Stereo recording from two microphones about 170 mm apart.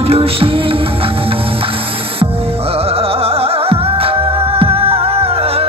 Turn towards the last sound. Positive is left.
turn(degrees=-35)  # may be behind; listen again after turning